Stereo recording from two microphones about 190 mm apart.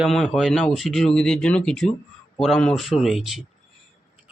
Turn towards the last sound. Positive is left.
turn(degrees=0)  # may be behind; listen again after turning